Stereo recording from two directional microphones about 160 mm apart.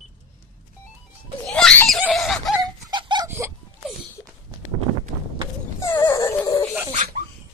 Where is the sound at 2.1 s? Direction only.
Centre (ahead or behind).